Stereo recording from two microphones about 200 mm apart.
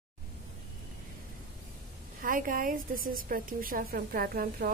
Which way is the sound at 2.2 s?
45° right (ahead or behind).